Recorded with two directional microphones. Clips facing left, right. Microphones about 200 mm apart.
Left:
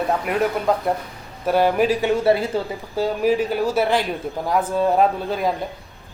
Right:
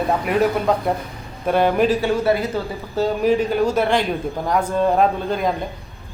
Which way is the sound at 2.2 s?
30° left (ahead or behind).